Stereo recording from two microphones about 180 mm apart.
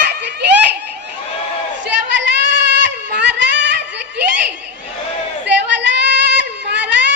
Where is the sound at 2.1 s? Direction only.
80° right.